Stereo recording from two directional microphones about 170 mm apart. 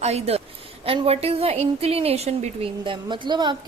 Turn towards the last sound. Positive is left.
turn(degrees=-25)  # may be behind; listen again after turning